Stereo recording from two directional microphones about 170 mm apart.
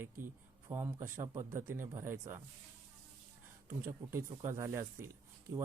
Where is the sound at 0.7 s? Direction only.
15° right (ahead or behind).